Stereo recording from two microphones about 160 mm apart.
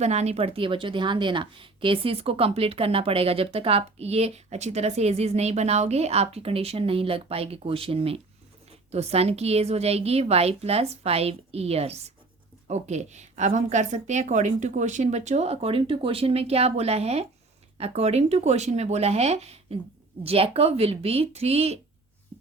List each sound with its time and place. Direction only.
0.0 s a woman's voice: 45° right (ahead or behind)